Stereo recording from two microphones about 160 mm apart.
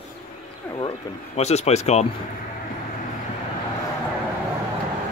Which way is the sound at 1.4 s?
40° left (ahead or behind).